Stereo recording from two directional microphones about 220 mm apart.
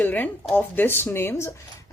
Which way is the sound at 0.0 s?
5° left (ahead or behind).